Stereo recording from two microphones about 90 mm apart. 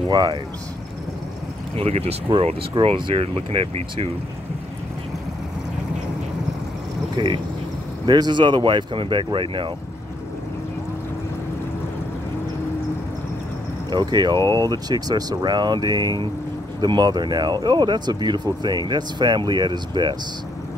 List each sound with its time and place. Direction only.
0.1 s speech: 50° right (ahead or behind)
1.8 s speech: 90° right
7.2 s speech: 60° right (ahead or behind)
13.8 s speech: 55° right (ahead or behind)